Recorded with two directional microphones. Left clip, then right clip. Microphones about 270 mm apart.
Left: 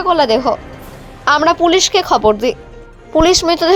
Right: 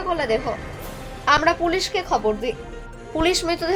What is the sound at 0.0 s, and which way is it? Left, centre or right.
A woman's voice, left.